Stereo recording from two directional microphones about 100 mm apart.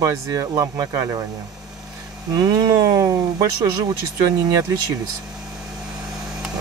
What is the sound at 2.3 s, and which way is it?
Speech, 40° right (ahead or behind).